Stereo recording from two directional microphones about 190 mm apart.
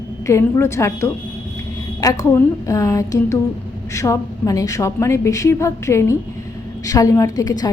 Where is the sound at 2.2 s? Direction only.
15° left (ahead or behind).